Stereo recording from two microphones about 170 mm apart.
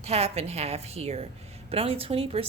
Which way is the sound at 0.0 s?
35° right (ahead or behind).